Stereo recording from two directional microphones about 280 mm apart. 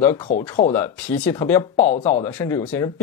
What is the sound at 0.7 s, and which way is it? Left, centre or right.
Speech, centre.